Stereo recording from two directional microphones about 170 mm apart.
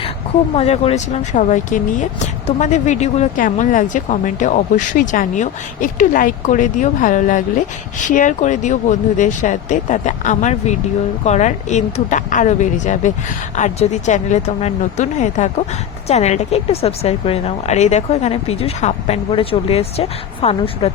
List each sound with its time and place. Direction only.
0.5 s a woman's voice: 35° left (ahead or behind)